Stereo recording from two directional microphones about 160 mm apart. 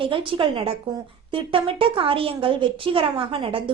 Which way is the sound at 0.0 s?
35° right (ahead or behind).